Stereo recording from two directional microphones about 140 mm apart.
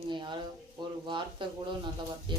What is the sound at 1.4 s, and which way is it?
Speech, 35° right (ahead or behind).